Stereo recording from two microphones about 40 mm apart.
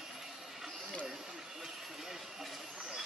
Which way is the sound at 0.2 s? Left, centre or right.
Centre.